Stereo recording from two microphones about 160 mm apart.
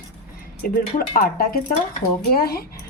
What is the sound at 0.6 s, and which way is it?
Speech, 65° left (ahead or behind).